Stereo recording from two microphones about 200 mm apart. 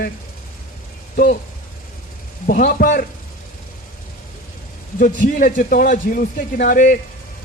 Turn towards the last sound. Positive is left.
turn(degrees=40)  # may be behind; listen again after turning